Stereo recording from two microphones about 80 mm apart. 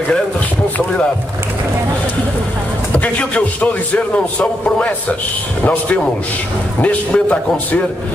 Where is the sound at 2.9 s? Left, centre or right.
Centre.